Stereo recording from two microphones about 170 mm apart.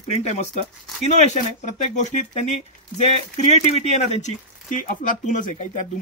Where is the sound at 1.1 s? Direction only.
45° left (ahead or behind).